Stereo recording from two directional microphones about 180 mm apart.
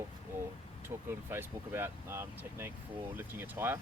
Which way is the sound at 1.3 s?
15° right (ahead or behind).